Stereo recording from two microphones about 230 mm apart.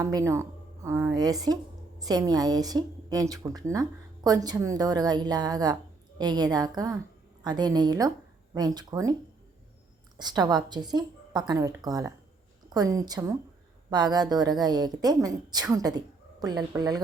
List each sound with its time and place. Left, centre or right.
0.0 s a woman's voice: centre
10.2 s a woman's voice: centre